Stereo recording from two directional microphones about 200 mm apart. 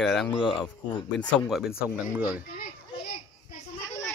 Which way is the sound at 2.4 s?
45° left (ahead or behind).